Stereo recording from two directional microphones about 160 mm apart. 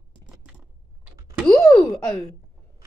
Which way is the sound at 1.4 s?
15° left (ahead or behind).